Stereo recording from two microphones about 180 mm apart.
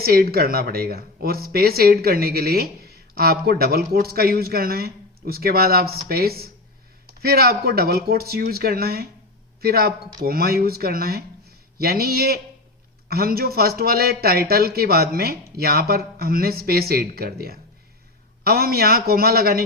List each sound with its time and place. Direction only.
0.0 s speech: 55° right (ahead or behind)